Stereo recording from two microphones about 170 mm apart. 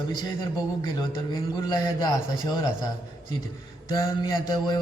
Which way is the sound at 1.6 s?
25° left (ahead or behind).